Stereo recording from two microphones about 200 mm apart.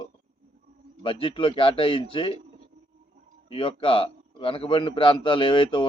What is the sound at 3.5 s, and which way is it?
A man's voice, 25° left (ahead or behind).